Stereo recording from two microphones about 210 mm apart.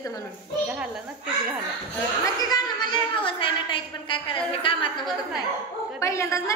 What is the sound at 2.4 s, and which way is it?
A woman's voice, 20° left (ahead or behind).